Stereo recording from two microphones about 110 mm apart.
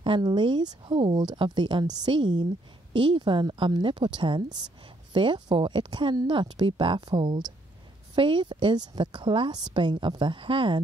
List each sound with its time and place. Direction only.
0.0 s speech: 45° right (ahead or behind)